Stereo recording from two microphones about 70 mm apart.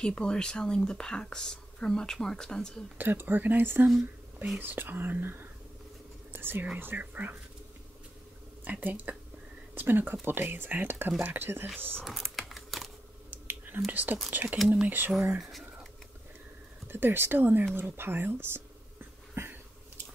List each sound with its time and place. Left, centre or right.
0.0 s speech: centre
3.0 s speech: right
6.3 s whispering: right
6.8 s speech: right
8.6 s speech: right
12.0 s typing: centre
13.3 s whispering: right
14.3 s speech: right
16.9 s speech: right
19.4 s a sound: right